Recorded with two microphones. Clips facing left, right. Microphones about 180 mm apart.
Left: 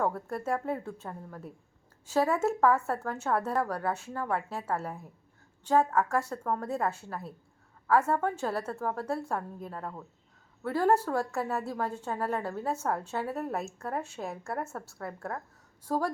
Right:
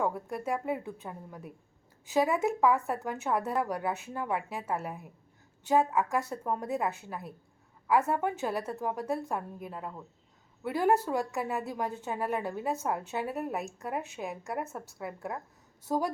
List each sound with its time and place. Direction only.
0.0 s a woman's voice: 15° right (ahead or behind)